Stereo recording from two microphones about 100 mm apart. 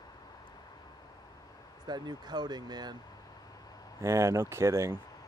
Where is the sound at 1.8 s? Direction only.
45° right (ahead or behind).